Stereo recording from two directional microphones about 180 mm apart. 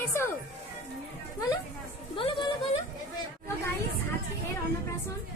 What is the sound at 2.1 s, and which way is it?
Speech, 30° left (ahead or behind).